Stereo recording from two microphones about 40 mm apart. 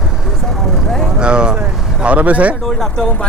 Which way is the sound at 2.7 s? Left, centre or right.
Centre.